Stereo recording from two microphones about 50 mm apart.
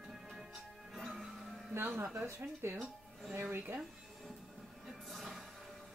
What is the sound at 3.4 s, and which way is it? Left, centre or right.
Speech, right.